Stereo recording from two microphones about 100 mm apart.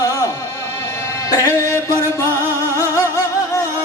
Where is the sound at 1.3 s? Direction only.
35° left (ahead or behind).